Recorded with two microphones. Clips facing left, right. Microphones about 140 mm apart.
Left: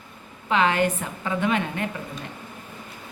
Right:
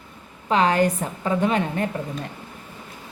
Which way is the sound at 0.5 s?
40° right (ahead or behind).